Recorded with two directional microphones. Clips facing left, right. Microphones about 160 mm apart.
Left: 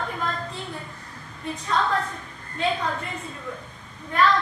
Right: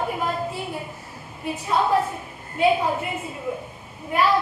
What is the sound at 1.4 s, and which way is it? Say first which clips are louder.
A woman's voice: right 3 dB; 10° right (ahead or behind).